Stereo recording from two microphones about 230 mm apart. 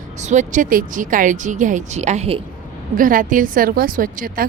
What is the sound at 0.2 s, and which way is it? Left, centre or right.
Speech, right.